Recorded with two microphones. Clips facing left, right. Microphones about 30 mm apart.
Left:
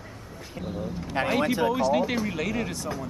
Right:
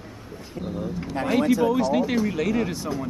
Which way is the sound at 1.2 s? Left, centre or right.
Left.